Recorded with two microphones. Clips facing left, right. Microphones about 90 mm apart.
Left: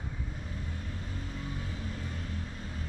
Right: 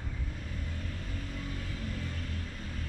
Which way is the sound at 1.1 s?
20° left (ahead or behind).